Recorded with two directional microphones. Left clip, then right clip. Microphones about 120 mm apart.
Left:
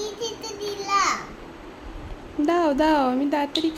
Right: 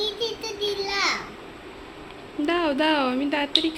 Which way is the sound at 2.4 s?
50° left (ahead or behind).